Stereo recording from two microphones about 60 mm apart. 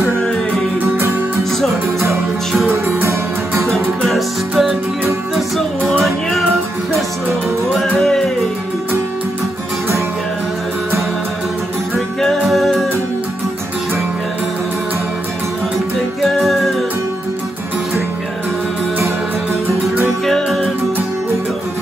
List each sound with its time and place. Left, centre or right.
2.7 s music: right
4.0 s music: centre
7.7 s music: centre
12.2 s music: centre
16.2 s music: centre
20.2 s music: centre